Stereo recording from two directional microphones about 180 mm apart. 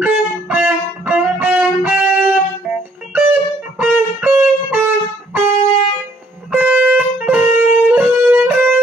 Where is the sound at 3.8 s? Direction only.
10° right (ahead or behind).